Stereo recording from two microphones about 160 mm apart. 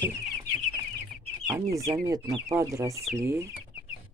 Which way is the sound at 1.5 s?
20° right (ahead or behind).